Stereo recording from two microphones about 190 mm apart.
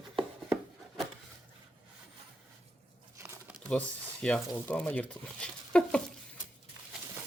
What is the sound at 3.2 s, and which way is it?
Crumpling, 15° right (ahead or behind).